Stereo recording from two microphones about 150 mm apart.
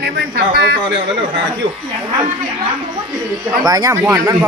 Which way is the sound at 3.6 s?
25° right (ahead or behind).